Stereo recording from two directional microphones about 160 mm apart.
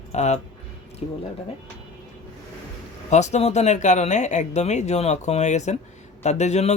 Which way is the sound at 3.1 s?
45° left (ahead or behind).